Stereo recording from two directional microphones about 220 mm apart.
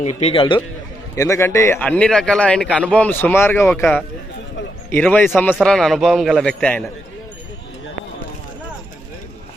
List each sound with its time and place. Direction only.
0.0 s a man's voice: 30° left (ahead or behind)
1.1 s a man's voice: 15° left (ahead or behind)